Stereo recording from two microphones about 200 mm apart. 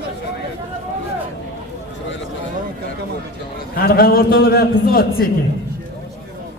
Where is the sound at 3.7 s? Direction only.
50° left (ahead or behind).